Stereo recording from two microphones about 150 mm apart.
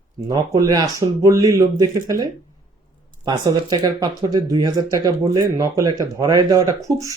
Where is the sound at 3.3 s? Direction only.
30° right (ahead or behind).